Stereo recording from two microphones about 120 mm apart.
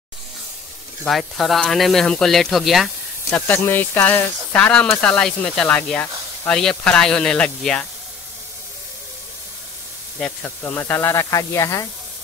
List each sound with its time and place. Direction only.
1.0 s speech: centre (ahead or behind)
3.3 s speech: 15° left (ahead or behind)
10.6 s speech: 20° left (ahead or behind)